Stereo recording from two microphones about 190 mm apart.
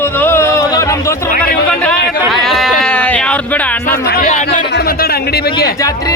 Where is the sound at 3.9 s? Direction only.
55° left (ahead or behind).